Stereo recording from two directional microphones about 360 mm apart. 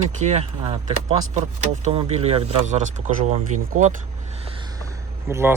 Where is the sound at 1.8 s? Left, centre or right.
Centre.